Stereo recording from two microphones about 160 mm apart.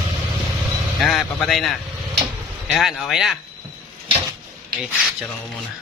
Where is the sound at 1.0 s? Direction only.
Centre (ahead or behind).